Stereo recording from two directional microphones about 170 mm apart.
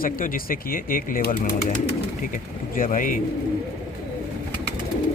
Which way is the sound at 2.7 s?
55° left (ahead or behind).